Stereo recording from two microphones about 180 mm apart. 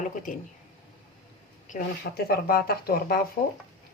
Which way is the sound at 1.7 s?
45° left (ahead or behind).